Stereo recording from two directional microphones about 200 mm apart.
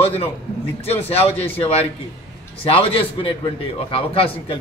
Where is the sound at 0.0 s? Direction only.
30° left (ahead or behind).